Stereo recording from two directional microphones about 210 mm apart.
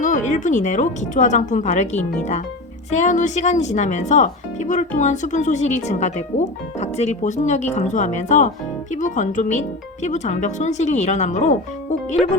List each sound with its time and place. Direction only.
0.0 s speech: 35° left (ahead or behind)